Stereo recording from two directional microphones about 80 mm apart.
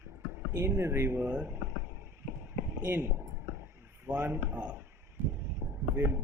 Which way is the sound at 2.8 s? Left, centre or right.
Right.